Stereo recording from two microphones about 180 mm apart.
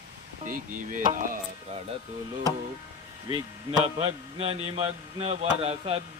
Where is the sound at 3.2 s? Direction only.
25° right (ahead or behind).